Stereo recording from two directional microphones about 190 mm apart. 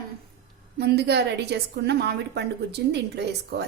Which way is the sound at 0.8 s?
60° right (ahead or behind).